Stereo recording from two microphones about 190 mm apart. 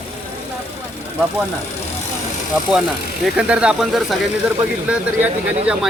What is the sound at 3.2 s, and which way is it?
Speech, 5° right (ahead or behind).